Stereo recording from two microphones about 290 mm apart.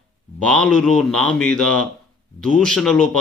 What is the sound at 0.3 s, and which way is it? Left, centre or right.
Speech, centre.